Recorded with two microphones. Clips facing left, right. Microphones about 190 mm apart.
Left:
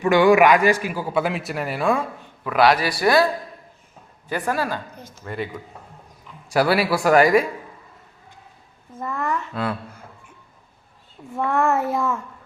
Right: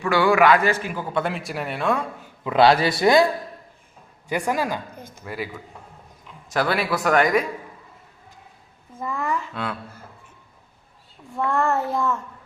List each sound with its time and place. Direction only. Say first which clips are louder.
0.0 s a man's voice: left 3 dB; 20° left (ahead or behind)
2.4 s speech: right 1 dB; 25° right (ahead or behind)
4.3 s speech: even; 15° right (ahead or behind)
5.2 s child singing: left 2 dB; 5° right (ahead or behind)
6.5 s a man's voice: left 4 dB; 10° left (ahead or behind)
9.0 s a sound: left 1 dB; 5° right (ahead or behind)
11.4 s a man's voice: left 2 dB; 15° left (ahead or behind)
11.7 s child singing: left 1 dB; centre (ahead or behind)